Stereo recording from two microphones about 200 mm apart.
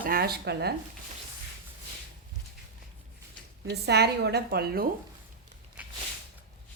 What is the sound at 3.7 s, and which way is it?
A woman's voice, 55° right (ahead or behind).